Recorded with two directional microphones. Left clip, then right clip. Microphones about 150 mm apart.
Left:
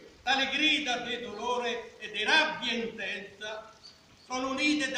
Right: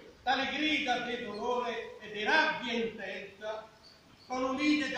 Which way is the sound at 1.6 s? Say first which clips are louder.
Left 3 dB; 35° right (ahead or behind).